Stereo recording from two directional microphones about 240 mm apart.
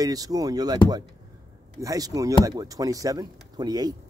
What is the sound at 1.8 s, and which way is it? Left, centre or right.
Speech, centre.